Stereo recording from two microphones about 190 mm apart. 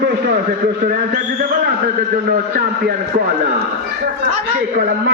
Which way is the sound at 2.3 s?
50° right (ahead or behind).